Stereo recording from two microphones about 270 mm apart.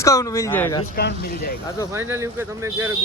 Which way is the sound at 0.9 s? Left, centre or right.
Left.